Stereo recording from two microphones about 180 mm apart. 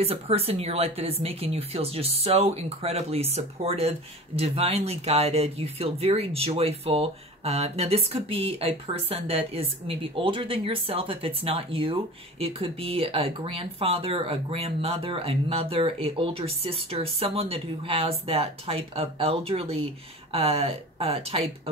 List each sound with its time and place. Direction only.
0.0 s speech: 35° right (ahead or behind)